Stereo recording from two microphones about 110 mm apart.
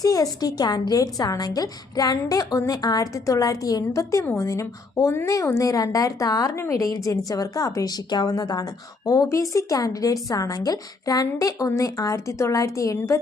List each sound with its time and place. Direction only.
0.0 s speech: 35° left (ahead or behind)